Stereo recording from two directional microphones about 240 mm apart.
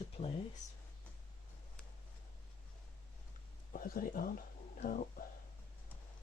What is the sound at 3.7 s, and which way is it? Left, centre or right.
Speech, left.